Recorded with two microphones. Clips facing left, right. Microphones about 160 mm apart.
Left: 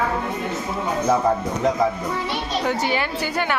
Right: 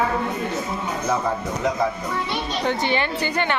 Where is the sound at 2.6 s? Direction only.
5° left (ahead or behind).